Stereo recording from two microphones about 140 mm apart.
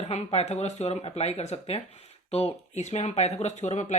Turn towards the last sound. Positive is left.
turn(degrees=55)  # may be behind; listen again after turning